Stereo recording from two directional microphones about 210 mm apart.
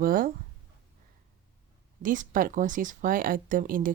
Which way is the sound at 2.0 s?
40° right (ahead or behind).